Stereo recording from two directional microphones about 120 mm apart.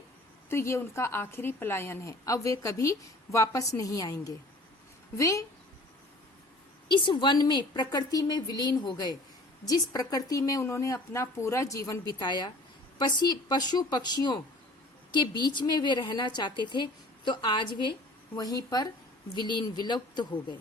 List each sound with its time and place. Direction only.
0.5 s a woman's voice: 25° left (ahead or behind)
6.8 s a woman's voice: 40° left (ahead or behind); by 11.9 s 25° left (ahead or behind)
12.2 s a woman's voice: 40° left (ahead or behind)
18.3 s a woman's voice: 30° left (ahead or behind)